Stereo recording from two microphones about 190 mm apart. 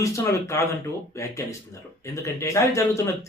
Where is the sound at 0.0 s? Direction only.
15° left (ahead or behind).